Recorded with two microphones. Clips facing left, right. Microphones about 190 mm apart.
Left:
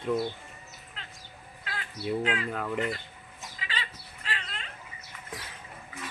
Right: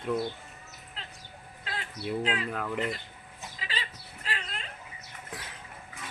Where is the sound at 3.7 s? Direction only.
35° right (ahead or behind).